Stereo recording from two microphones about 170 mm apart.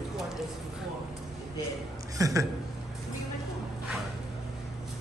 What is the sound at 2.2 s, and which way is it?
Speech, 20° right (ahead or behind).